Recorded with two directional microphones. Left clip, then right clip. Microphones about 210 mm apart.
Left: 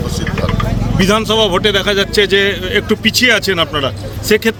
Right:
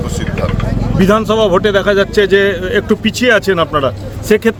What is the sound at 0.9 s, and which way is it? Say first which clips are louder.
A man's voice: right 1 dB; 40° right (ahead or behind).